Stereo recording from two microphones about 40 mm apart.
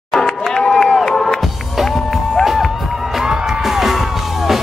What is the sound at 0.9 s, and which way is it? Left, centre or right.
Music, centre.